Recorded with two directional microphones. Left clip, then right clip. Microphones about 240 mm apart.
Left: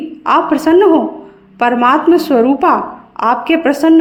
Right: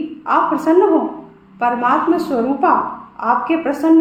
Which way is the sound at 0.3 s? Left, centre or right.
Left.